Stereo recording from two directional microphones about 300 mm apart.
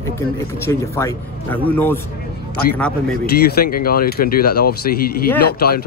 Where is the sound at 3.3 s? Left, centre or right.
Left.